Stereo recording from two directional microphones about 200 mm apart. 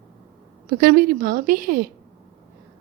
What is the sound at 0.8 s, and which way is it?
A woman's voice, 50° right (ahead or behind).